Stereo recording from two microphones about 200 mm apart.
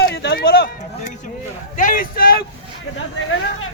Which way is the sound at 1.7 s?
40° left (ahead or behind).